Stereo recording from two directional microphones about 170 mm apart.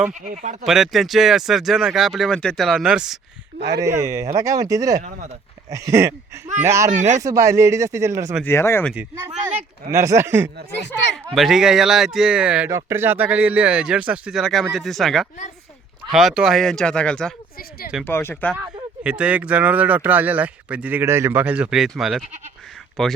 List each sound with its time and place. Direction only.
0.1 s speech: 45° right (ahead or behind)
0.6 s speech: centre (ahead or behind)
3.8 s speech: 20° right (ahead or behind)
6.5 s speech: 40° right (ahead or behind)
7.2 s speech: 20° right (ahead or behind)
8.4 s speech: 15° left (ahead or behind)
9.9 s speech: 15° right (ahead or behind)
11.3 s speech: centre (ahead or behind)
17.6 s speech: 60° left (ahead or behind)
18.0 s speech: 15° left (ahead or behind)
18.5 s speech: 10° right (ahead or behind)